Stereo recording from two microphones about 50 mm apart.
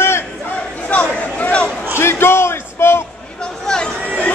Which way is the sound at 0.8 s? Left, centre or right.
Left.